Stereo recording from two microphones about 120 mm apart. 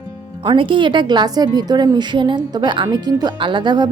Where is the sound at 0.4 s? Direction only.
45° right (ahead or behind).